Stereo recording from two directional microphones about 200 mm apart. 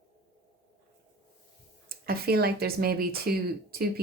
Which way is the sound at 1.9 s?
50° right (ahead or behind).